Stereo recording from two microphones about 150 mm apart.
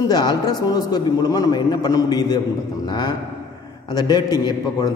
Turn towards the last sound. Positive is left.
turn(degrees=25)  # may be behind; listen again after turning